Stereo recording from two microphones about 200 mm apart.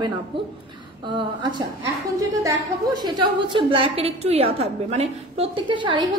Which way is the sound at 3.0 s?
20° right (ahead or behind).